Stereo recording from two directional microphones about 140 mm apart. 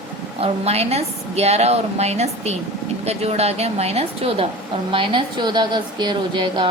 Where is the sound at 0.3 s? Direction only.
45° right (ahead or behind).